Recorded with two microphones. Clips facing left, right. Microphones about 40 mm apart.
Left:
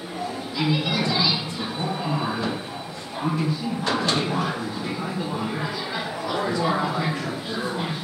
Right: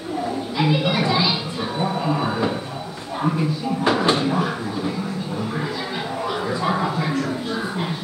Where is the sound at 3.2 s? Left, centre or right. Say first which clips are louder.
Right 3 dB; centre.